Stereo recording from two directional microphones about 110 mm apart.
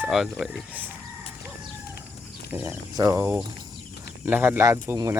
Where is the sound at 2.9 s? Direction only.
25° right (ahead or behind).